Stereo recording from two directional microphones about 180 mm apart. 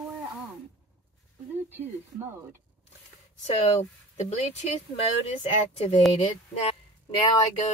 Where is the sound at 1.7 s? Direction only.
10° right (ahead or behind).